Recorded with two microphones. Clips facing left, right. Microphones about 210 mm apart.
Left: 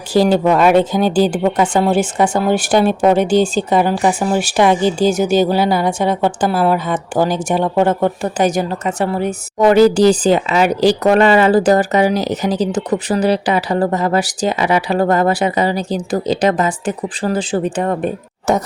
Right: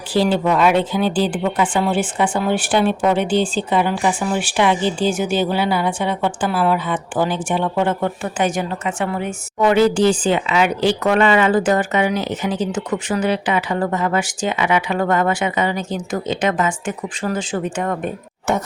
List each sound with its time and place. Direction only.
0.1 s speech: 45° left (ahead or behind)